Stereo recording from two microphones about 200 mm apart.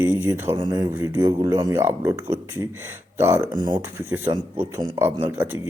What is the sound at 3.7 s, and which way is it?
Speech, 10° right (ahead or behind).